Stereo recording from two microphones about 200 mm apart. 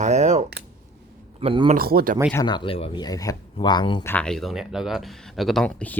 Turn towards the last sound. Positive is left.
turn(degrees=5)  # may be behind; listen again after turning